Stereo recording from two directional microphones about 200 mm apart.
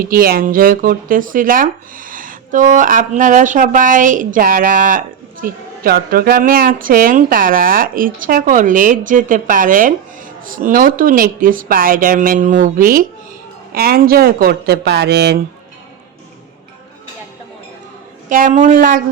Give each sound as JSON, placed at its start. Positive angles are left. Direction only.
{"t": 0.0, "sound": "speech", "side_deg": -45}
{"t": 18.3, "sound": "speech", "side_deg": -40}